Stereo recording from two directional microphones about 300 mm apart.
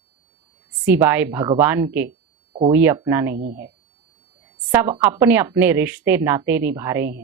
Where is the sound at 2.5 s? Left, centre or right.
Centre.